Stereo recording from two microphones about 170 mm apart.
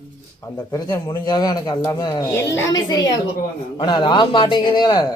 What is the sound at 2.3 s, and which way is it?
A woman's voice, 15° left (ahead or behind).